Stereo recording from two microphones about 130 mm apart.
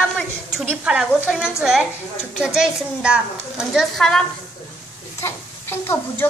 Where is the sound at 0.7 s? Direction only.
10° right (ahead or behind).